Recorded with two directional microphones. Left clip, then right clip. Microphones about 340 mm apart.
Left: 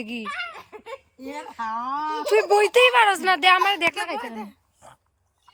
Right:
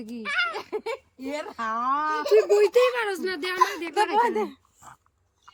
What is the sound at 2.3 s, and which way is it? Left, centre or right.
Speech, centre.